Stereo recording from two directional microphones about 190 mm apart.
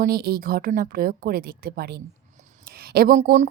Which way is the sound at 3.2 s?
35° right (ahead or behind).